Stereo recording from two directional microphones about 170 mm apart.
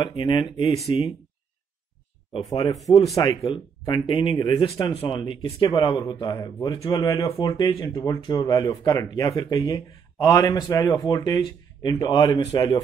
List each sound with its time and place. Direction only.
0.1 s speech: 30° left (ahead or behind)
2.3 s speech: 30° left (ahead or behind)